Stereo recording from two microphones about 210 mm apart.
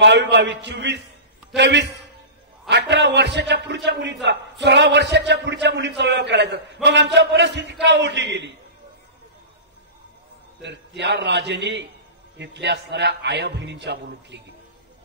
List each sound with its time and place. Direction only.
0.0 s a man's voice: 55° right (ahead or behind)
10.6 s a man's voice: 55° right (ahead or behind)